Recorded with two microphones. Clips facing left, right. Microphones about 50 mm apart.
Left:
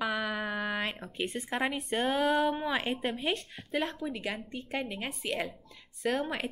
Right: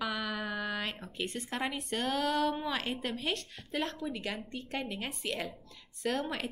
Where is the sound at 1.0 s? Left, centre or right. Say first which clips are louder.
Left 3 dB; centre.